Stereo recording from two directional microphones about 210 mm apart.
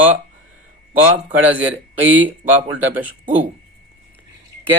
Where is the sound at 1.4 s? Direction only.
10° right (ahead or behind).